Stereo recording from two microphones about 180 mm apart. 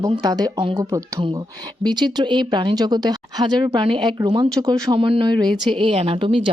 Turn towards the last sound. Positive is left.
turn(degrees=-30)  # may be behind; listen again after turning